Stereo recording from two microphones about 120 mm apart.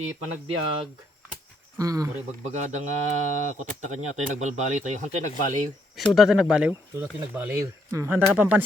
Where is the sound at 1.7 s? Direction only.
30° right (ahead or behind).